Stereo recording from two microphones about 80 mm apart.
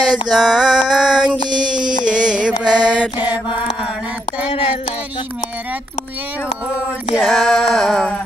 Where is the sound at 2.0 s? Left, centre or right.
Centre.